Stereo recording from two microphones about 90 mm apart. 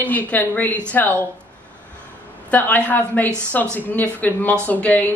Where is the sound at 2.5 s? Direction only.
20° left (ahead or behind).